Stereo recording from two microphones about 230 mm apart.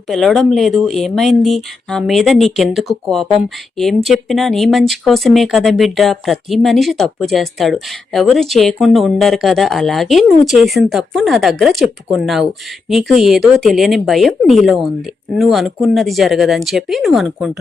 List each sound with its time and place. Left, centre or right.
0.1 s speech: centre